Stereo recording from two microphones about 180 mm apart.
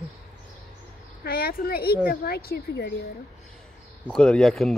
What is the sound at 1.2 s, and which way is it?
A woman's voice, 60° left (ahead or behind).